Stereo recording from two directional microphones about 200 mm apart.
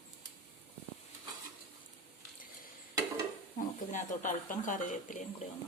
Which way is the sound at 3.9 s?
40° left (ahead or behind).